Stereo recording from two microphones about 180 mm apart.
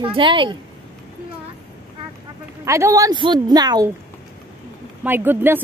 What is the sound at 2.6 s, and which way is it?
A woman's voice, 15° right (ahead or behind).